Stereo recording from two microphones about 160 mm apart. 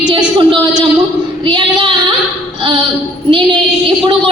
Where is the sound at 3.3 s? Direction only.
30° right (ahead or behind).